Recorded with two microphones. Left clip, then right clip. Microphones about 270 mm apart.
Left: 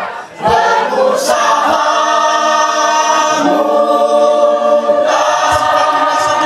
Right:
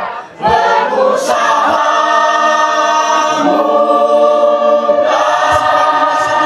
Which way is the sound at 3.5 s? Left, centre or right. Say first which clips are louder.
Right 1 dB; centre.